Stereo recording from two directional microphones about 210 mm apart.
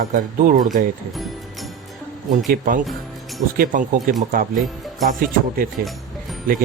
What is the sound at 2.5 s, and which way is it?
Speech, 40° right (ahead or behind).